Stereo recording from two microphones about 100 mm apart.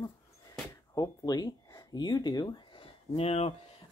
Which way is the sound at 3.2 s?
90° left.